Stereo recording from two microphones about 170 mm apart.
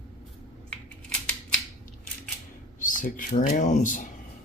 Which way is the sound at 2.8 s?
50° left (ahead or behind).